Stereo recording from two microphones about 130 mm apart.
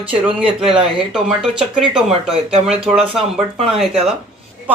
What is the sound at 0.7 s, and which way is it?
Speech, 45° right (ahead or behind).